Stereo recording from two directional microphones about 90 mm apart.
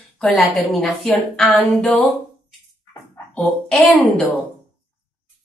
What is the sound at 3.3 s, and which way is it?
Speech, 5° left (ahead or behind).